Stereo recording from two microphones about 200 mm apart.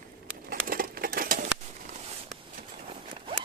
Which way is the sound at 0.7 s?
45° right (ahead or behind).